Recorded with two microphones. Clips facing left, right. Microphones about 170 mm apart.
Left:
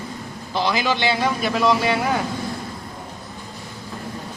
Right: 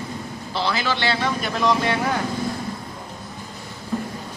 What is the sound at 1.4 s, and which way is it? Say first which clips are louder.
Speech: left 2 dB; centre (ahead or behind).